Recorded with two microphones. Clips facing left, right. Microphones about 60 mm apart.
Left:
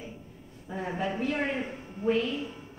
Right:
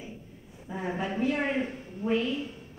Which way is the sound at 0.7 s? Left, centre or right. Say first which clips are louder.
Even; centre.